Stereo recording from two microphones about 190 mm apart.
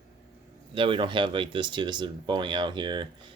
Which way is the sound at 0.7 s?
25° right (ahead or behind).